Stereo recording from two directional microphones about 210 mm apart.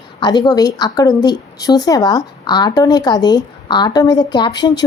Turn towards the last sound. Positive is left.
turn(degrees=20)  # may be behind; listen again after turning